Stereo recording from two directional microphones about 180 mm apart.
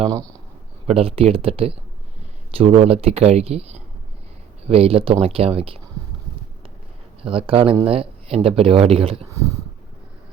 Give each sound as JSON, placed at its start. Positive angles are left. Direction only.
{"t": 0.9, "sound": "speech", "side_deg": -35}
{"t": 7.2, "sound": "speech", "side_deg": -30}